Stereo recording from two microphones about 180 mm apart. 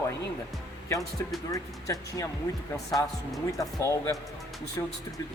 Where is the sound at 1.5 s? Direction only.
20° left (ahead or behind).